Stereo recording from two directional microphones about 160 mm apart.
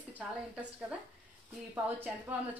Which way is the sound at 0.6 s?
10° right (ahead or behind).